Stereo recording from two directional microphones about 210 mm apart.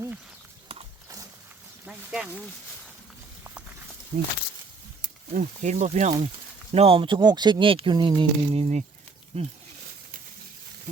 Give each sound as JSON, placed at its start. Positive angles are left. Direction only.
{"t": 1.8, "sound": "a sound", "side_deg": -5}
{"t": 4.1, "sound": "speech", "side_deg": -55}
{"t": 5.3, "sound": "speech", "side_deg": -35}